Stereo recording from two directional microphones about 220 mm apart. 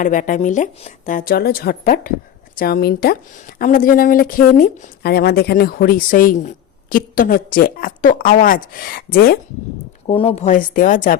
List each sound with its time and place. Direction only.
0.0 s a woman's voice: 35° left (ahead or behind)
10.1 s a woman's voice: 25° left (ahead or behind)